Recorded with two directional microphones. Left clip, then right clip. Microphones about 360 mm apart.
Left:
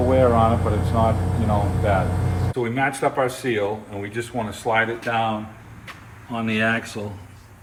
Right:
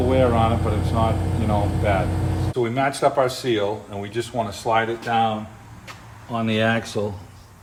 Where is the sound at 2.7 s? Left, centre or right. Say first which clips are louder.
Right 2 dB; centre.